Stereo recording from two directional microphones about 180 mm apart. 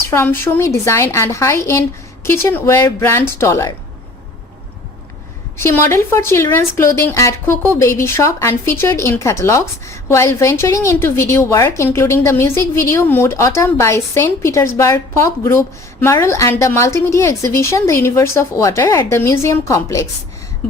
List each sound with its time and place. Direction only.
0.1 s speech: 15° left (ahead or behind)
5.5 s speech: 15° left (ahead or behind)